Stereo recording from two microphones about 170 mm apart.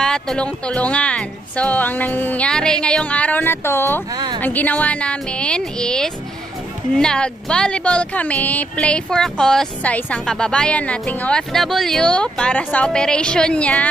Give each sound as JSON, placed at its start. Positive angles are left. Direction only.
{"t": 0.0, "sound": "speech", "side_deg": 5}
{"t": 4.1, "sound": "a woman's voice", "side_deg": -25}
{"t": 4.4, "sound": "speech", "side_deg": 10}